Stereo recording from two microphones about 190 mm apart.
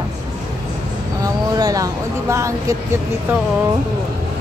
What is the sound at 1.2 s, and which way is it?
Speech, 20° right (ahead or behind).